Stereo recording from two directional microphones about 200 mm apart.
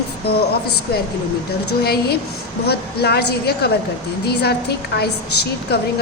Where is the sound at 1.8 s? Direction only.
55° left (ahead or behind).